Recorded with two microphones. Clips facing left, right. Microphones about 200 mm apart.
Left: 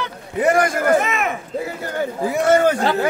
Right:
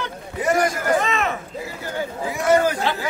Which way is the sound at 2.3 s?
65° left (ahead or behind).